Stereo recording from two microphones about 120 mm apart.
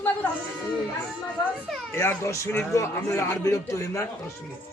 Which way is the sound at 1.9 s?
20° left (ahead or behind).